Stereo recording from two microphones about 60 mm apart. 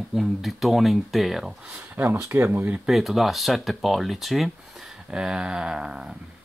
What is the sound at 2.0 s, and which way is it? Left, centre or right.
Speech, right.